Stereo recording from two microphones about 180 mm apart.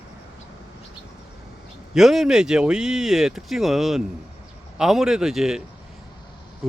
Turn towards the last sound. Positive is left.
turn(degrees=-5)  # may be behind; listen again after turning